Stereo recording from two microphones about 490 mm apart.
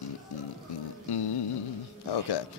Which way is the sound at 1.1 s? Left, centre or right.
Left.